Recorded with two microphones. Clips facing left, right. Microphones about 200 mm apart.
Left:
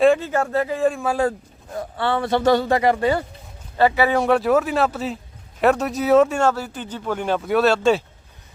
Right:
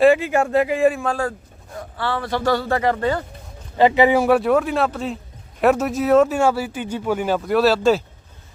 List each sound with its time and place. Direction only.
0.0 s speech: 10° right (ahead or behind)
1.0 s speech: 15° left (ahead or behind)
3.8 s speech: 15° right (ahead or behind)
4.2 s speech: 5° right (ahead or behind)